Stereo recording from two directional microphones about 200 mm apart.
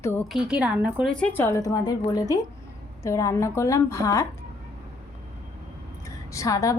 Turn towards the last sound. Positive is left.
turn(degrees=15)  # may be behind; listen again after turning